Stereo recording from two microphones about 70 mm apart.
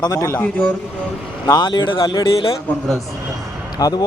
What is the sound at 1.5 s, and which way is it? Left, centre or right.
Speech, left.